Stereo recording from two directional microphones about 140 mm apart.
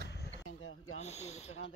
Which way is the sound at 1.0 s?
50° left (ahead or behind).